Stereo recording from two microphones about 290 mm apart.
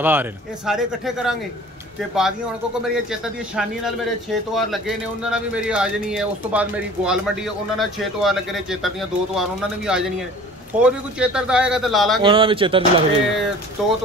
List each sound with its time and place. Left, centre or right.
0.0 s a man's voice: centre
2.8 s a man's voice: centre
12.2 s speech: centre
13.8 s a man's voice: centre